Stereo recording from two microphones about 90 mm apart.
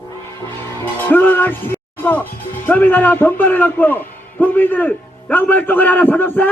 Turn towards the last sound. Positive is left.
turn(degrees=20)  # may be behind; listen again after turning